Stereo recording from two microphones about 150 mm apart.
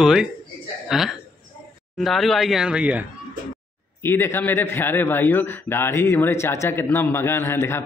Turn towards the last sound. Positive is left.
turn(degrees=15)  # may be behind; listen again after turning